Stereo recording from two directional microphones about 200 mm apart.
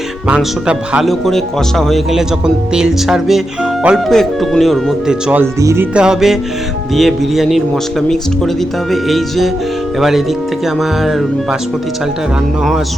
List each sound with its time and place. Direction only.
0.3 s speech: 5° right (ahead or behind)
8.9 s speech: centre (ahead or behind)